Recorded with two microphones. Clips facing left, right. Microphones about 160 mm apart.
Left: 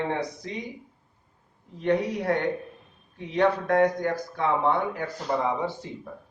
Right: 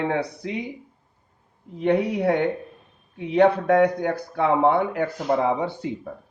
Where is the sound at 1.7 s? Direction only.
60° right (ahead or behind).